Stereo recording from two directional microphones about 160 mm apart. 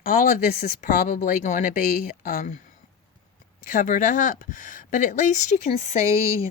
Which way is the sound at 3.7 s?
55° left (ahead or behind).